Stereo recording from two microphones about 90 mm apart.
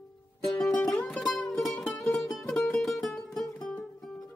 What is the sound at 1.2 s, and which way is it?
Music, centre (ahead or behind).